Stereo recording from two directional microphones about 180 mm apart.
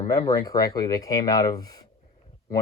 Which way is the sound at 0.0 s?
20° left (ahead or behind).